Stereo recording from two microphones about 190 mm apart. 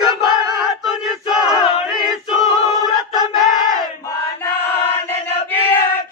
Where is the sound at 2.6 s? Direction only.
20° right (ahead or behind).